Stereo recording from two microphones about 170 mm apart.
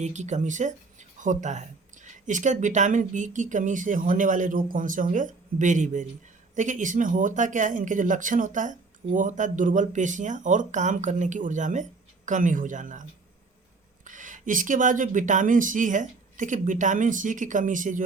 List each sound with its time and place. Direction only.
0.0 s speech: 45° right (ahead or behind)